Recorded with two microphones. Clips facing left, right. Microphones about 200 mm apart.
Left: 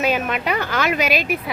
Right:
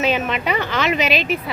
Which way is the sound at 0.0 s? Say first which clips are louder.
Right 1 dB; 5° left (ahead or behind).